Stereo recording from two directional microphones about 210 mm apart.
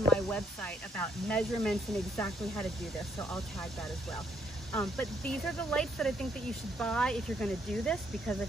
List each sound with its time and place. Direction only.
0.1 s speech: 5° left (ahead or behind)
4.7 s speech: 5° left (ahead or behind)